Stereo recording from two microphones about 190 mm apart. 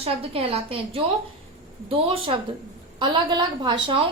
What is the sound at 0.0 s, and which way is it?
A woman's voice, 30° right (ahead or behind).